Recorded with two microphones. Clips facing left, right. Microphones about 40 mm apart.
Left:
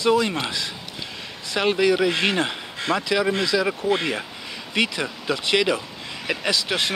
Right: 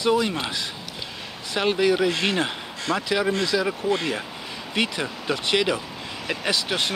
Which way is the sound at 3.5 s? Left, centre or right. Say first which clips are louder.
Left 2 dB; left.